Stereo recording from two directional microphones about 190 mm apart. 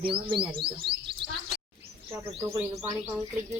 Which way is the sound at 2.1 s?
15° right (ahead or behind).